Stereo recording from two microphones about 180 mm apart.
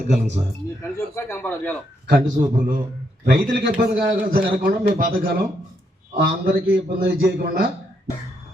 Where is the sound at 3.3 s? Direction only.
55° right (ahead or behind).